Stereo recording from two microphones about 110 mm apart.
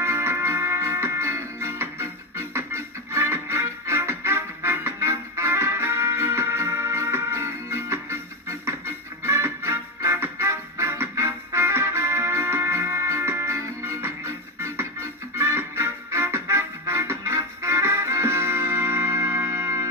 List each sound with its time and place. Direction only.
0.0 s music: 25° right (ahead or behind)